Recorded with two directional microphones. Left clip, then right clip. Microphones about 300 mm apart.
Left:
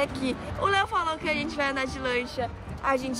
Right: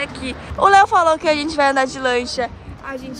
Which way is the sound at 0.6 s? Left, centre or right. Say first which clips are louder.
Right 14 dB; centre.